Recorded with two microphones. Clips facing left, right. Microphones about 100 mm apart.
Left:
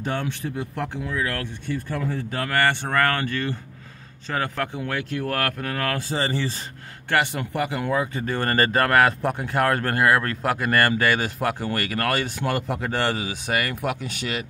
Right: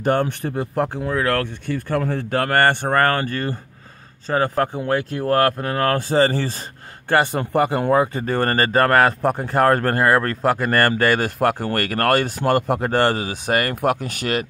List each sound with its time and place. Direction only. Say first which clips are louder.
0.0 s speech: right 8 dB; 55° right (ahead or behind)
0.7 s speech: right 7 dB; 40° right (ahead or behind)
1.1 s speech: right 8 dB; 65° right (ahead or behind); by 5.9 s 35° right (ahead or behind)
5.9 s speech: right 8 dB; 50° right (ahead or behind)